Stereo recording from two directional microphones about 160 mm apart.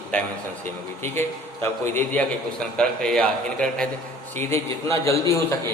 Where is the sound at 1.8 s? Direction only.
10° left (ahead or behind).